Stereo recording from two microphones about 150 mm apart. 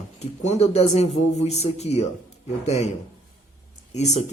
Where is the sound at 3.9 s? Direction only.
50° left (ahead or behind).